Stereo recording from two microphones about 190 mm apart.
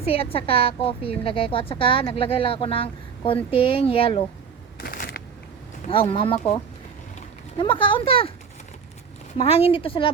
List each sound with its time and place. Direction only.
0.0 s a woman's voice: 30° left (ahead or behind)
4.8 s a sound: 50° left (ahead or behind)
5.9 s a woman's voice: 30° left (ahead or behind)
7.6 s a woman's voice: 25° left (ahead or behind)
9.4 s a woman's voice: 30° left (ahead or behind)